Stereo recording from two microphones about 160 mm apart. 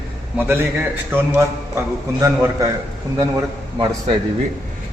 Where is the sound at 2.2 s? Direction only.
20° right (ahead or behind).